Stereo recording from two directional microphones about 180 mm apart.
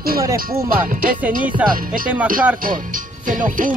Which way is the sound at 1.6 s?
5° right (ahead or behind).